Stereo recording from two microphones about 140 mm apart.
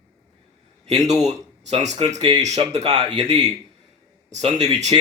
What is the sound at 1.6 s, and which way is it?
A man's voice, 55° right (ahead or behind).